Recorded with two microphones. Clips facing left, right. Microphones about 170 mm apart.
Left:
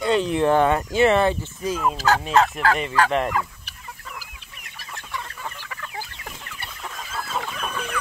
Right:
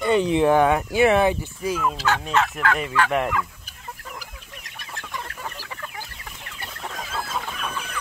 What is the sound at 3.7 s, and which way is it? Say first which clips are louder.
Chicken: left 2 dB; 75° left (ahead or behind).